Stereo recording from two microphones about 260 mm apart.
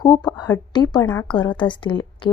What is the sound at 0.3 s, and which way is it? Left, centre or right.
Speech, centre.